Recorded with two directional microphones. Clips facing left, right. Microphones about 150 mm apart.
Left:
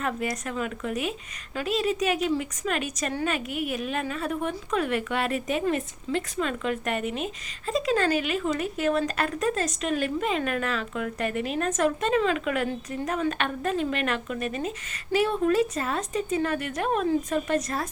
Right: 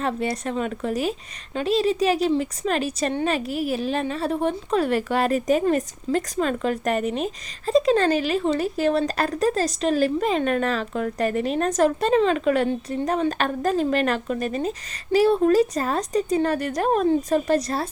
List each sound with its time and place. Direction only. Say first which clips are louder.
0.0 s speech: right 4 dB; 30° right (ahead or behind)